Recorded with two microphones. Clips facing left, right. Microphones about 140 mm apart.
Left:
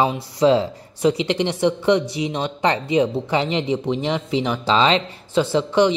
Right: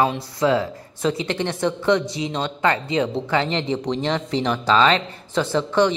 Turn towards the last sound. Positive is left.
turn(degrees=15)  # may be behind; listen again after turning